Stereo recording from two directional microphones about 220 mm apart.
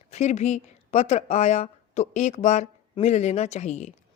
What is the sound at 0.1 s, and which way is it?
Speech, 30° left (ahead or behind).